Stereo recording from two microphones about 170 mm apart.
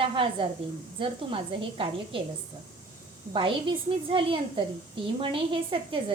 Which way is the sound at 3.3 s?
30° right (ahead or behind).